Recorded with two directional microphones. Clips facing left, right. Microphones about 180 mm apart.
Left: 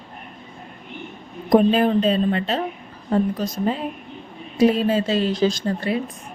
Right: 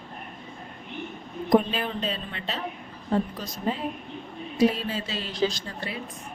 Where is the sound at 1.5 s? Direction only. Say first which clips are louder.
Left 7 dB; 50° left (ahead or behind).